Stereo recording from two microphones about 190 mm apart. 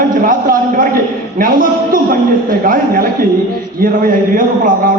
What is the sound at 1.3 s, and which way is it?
A man's voice, 45° right (ahead or behind).